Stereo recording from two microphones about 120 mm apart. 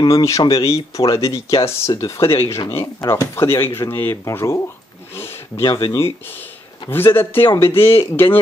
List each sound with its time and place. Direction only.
0.0 s speech: 25° left (ahead or behind)
5.1 s a sound: 20° left (ahead or behind)
5.6 s speech: 45° left (ahead or behind)
5.9 s speech: 20° left (ahead or behind)